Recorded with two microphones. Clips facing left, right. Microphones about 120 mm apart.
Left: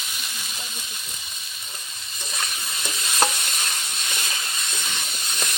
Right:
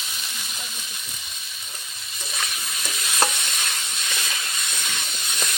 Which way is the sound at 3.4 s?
5° left (ahead or behind).